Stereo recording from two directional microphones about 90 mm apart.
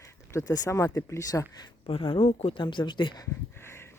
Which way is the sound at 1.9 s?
75° left (ahead or behind).